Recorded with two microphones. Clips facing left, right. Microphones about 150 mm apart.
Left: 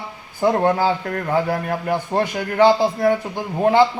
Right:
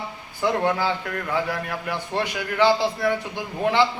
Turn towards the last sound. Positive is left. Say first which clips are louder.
# left 6 dB
turn(degrees=45)  # may be behind; listen again after turning